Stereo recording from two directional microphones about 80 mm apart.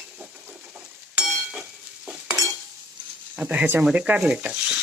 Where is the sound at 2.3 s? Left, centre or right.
Right.